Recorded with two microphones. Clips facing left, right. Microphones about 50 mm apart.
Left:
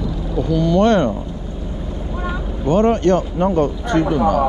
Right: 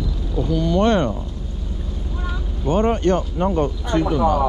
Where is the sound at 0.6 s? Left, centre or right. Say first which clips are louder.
Left 3 dB; centre.